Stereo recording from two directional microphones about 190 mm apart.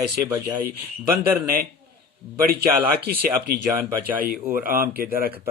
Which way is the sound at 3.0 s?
55° right (ahead or behind).